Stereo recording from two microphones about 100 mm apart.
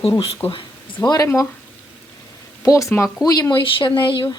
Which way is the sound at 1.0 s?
40° left (ahead or behind).